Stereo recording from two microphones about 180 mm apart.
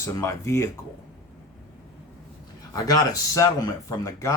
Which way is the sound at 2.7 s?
20° left (ahead or behind).